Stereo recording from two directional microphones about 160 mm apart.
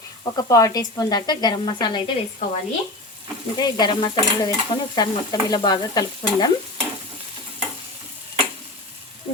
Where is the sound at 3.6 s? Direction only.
25° left (ahead or behind).